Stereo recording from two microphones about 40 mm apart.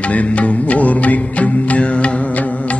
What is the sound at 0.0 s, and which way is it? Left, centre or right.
Music, left.